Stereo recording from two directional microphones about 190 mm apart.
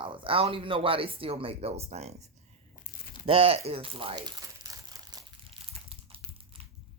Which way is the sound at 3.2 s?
30° right (ahead or behind).